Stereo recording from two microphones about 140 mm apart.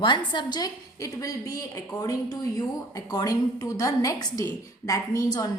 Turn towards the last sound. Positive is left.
turn(degrees=25)  # may be behind; listen again after turning